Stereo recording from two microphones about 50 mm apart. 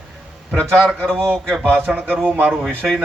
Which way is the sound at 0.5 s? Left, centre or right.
Right.